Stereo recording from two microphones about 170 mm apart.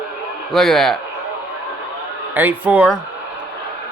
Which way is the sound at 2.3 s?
10° right (ahead or behind).